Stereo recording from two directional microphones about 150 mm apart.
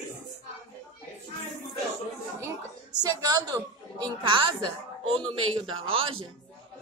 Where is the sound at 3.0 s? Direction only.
25° right (ahead or behind).